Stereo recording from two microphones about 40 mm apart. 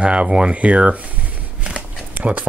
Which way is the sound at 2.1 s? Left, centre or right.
Right.